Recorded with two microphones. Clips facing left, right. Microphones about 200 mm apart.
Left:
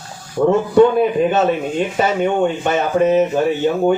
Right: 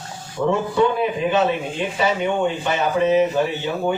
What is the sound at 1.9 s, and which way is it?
Speech, 50° left (ahead or behind).